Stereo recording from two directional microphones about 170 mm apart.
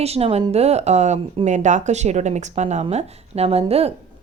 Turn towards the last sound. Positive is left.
turn(degrees=-35)  # may be behind; listen again after turning